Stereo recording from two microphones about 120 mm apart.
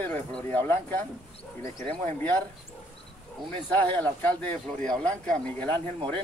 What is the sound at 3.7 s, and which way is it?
Speech, 15° left (ahead or behind).